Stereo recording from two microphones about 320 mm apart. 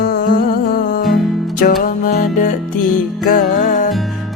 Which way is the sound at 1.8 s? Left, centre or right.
Left.